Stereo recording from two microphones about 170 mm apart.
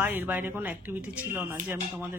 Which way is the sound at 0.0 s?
10° right (ahead or behind).